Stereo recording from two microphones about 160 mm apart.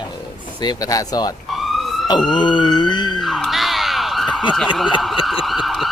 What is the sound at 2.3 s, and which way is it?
Police car, 30° left (ahead or behind).